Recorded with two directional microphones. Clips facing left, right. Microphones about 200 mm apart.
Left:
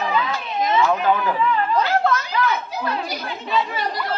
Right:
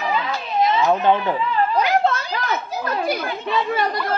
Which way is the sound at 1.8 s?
15° right (ahead or behind).